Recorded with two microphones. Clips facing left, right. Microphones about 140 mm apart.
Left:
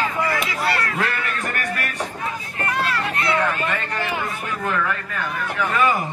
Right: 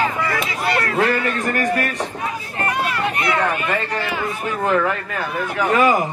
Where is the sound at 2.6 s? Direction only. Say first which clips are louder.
Right 2 dB; 15° right (ahead or behind).